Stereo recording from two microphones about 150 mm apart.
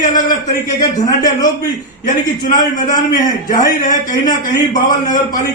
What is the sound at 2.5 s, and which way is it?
A man's voice, 65° left (ahead or behind).